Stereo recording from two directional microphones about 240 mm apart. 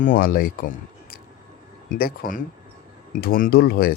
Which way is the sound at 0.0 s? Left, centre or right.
Left.